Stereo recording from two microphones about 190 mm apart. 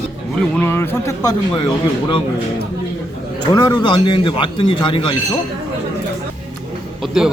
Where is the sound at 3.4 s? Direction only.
20° left (ahead or behind).